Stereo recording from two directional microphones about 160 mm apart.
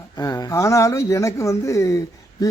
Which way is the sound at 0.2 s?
20° left (ahead or behind).